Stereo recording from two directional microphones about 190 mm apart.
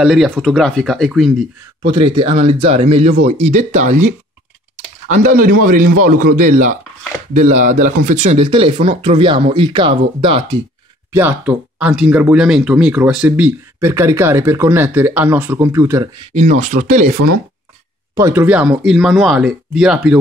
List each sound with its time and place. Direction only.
0.0 s speech: centre (ahead or behind)
1.9 s a man's voice: 25° right (ahead or behind)
8.5 s speech: 25° right (ahead or behind)
11.1 s speech: 10° right (ahead or behind)
16.3 s speech: 40° right (ahead or behind)
18.1 s speech: 15° right (ahead or behind)